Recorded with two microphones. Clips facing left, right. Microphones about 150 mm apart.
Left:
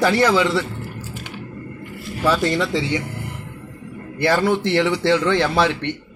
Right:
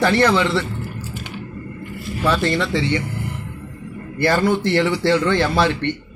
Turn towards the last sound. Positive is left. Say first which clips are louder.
# right 1 dB
turn(degrees=0)  # may be behind; listen again after turning